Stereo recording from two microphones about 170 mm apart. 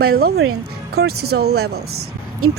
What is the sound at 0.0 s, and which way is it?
Speech, 65° right (ahead or behind).